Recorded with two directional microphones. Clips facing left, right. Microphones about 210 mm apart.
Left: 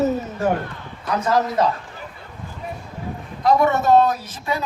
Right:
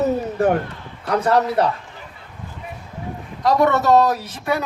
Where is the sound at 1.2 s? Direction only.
60° right (ahead or behind).